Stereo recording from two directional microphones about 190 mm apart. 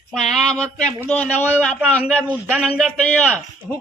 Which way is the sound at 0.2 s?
Centre (ahead or behind).